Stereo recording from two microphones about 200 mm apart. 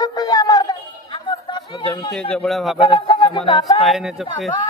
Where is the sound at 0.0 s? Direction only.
20° left (ahead or behind).